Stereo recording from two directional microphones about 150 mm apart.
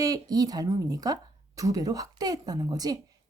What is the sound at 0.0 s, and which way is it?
A woman's voice, 25° right (ahead or behind).